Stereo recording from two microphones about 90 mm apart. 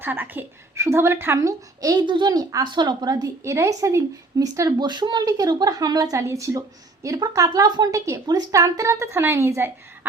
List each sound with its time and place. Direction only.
0.0 s a woman's voice: 20° right (ahead or behind); by 2.0 s 40° right (ahead or behind)
2.0 s speech: 55° right (ahead or behind)
2.6 s a woman's voice: 55° right (ahead or behind); by 4.9 s 40° right (ahead or behind)
4.9 s a woman's voice: 55° right (ahead or behind); by 10.1 s 25° right (ahead or behind)